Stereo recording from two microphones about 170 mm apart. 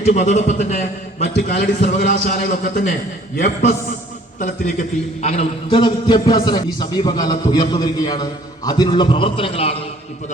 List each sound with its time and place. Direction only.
0.0 s a man's voice: 45° left (ahead or behind)
1.2 s a man's voice: 55° left (ahead or behind)
5.2 s a man's voice: 35° left (ahead or behind)